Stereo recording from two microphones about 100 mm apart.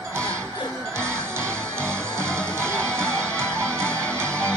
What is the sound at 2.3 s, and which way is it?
Music, 10° left (ahead or behind).